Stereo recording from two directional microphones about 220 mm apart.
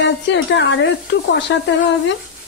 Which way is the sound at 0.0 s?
55° left (ahead or behind).